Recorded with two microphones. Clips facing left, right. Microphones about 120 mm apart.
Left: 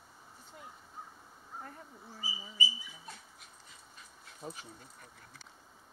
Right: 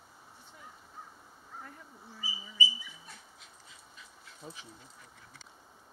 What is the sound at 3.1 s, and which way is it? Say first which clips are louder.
Dog: left 2 dB; 45° left (ahead or behind).